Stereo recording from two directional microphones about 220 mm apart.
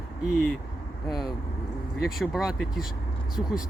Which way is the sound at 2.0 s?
Centre (ahead or behind).